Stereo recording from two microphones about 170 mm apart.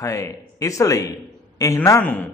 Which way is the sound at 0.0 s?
20° left (ahead or behind).